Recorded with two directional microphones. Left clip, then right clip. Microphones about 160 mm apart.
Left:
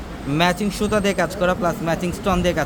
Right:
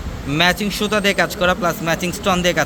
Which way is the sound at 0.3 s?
Centre (ahead or behind).